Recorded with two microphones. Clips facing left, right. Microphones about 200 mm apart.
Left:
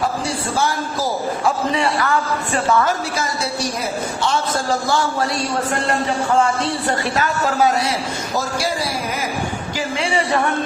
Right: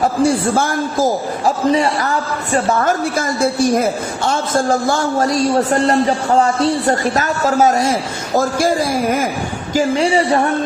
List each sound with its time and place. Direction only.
0.3 s a woman's voice: 50° right (ahead or behind)
2.7 s a woman's voice: 50° right (ahead or behind)